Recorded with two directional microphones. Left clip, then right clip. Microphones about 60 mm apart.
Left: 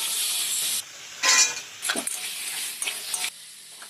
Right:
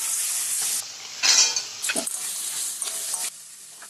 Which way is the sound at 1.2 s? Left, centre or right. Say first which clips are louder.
Right 1 dB; right.